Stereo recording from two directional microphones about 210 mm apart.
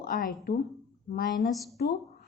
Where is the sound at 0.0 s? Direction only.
40° left (ahead or behind).